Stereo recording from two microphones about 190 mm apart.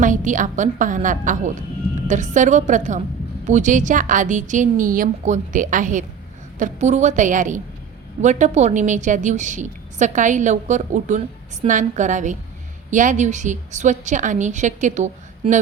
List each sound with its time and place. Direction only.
0.0 s a woman's voice: 45° right (ahead or behind)